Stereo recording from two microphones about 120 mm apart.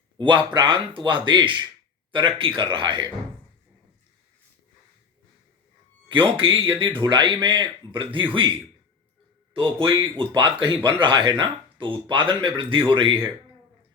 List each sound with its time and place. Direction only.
0.2 s speech: 40° right (ahead or behind)
6.1 s speech: 45° right (ahead or behind)
9.6 s speech: 45° right (ahead or behind)